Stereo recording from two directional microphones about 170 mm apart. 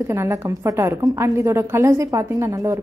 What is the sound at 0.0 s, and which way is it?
A woman's voice, 15° right (ahead or behind).